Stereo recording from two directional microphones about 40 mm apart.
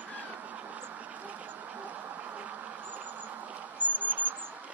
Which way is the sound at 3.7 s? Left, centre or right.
Right.